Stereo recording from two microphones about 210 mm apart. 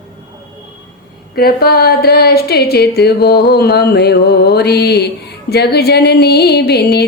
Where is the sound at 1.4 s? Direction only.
45° left (ahead or behind).